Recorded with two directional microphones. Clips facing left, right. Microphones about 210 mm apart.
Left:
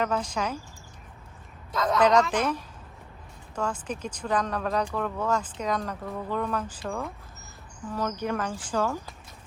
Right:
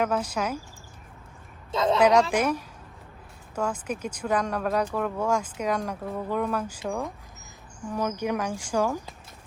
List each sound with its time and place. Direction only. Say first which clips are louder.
0.0 s speech: right 2 dB; 10° right (ahead or behind)
1.7 s a man's voice: right 3 dB; 25° right (ahead or behind)
2.0 s speech: right 1 dB; 10° right (ahead or behind)